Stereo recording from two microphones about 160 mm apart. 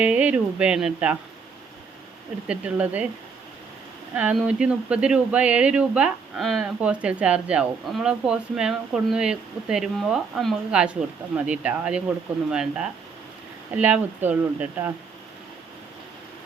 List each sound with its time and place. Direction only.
0.0 s speech: 10° right (ahead or behind)
2.5 s speech: 10° right (ahead or behind)
4.1 s speech: 5° right (ahead or behind)